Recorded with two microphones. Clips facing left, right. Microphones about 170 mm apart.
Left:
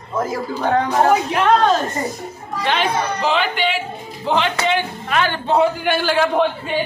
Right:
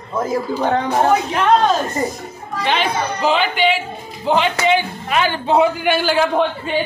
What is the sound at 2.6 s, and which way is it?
A man's voice, 5° right (ahead or behind).